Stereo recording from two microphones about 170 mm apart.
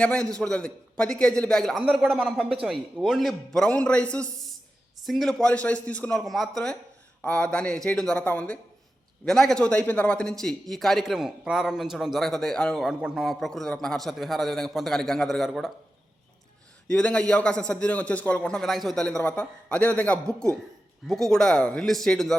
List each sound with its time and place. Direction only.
0.0 s a man's voice: 5° left (ahead or behind)
16.9 s a man's voice: 5° left (ahead or behind)